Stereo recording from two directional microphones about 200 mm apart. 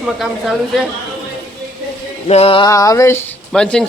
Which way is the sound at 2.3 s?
30° left (ahead or behind).